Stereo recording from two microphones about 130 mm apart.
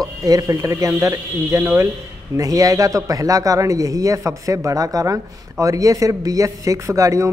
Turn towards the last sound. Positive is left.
turn(degrees=-25)  # may be behind; listen again after turning